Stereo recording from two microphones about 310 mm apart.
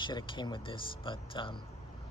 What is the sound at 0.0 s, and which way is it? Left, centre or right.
Speech, centre.